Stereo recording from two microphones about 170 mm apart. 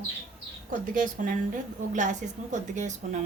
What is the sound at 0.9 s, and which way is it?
A woman's voice, 55° right (ahead or behind).